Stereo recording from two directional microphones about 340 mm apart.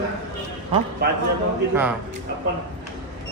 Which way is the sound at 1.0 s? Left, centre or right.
Right.